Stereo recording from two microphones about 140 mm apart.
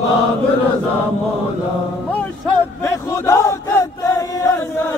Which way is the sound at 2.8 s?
20° left (ahead or behind).